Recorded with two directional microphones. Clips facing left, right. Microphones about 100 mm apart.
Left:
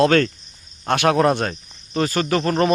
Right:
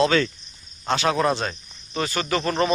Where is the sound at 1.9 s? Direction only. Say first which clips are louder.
Left 5 dB; 40° left (ahead or behind).